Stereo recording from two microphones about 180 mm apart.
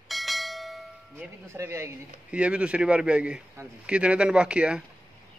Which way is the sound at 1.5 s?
15° right (ahead or behind).